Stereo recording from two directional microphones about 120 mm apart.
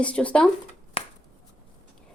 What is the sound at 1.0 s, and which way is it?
Shuffling cards, 50° left (ahead or behind).